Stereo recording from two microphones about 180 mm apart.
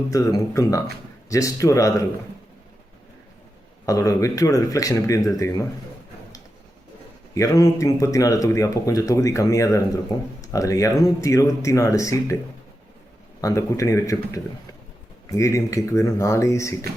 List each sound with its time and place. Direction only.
0.1 s speech: 20° left (ahead or behind)
3.8 s speech: 20° left (ahead or behind)
7.3 s speech: 20° left (ahead or behind)
13.4 s speech: 15° left (ahead or behind)